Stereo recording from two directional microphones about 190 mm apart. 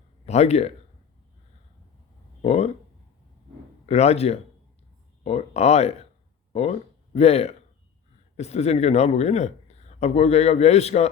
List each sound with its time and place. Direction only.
0.3 s speech: 35° left (ahead or behind)
2.4 s speech: 35° left (ahead or behind)
3.8 s speech: 35° left (ahead or behind)